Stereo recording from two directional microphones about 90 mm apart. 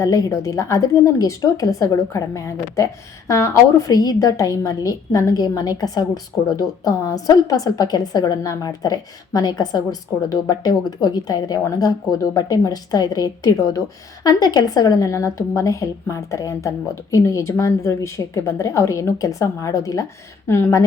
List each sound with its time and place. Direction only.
0.0 s a woman's voice: 40° left (ahead or behind)